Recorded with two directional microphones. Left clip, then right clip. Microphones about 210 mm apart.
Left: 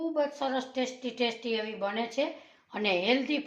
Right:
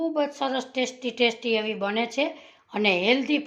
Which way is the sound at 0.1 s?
40° right (ahead or behind).